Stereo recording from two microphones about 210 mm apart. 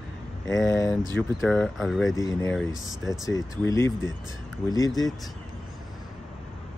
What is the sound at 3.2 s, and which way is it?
Speech, 15° left (ahead or behind).